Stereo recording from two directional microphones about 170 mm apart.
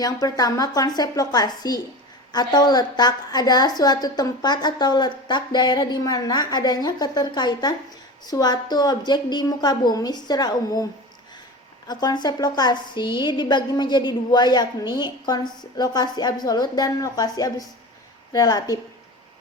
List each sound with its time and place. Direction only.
0.0 s a woman's voice: 20° left (ahead or behind)
11.9 s a woman's voice: 25° left (ahead or behind)